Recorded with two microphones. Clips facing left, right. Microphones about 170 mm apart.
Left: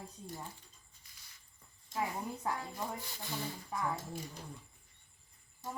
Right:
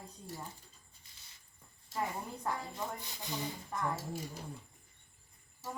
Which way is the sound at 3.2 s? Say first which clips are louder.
Right 3 dB; 20° right (ahead or behind).